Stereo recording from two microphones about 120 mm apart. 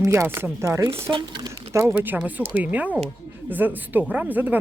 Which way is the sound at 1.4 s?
25° right (ahead or behind).